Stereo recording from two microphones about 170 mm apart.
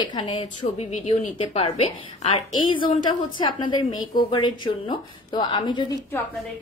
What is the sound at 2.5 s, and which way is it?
Speech, 30° left (ahead or behind).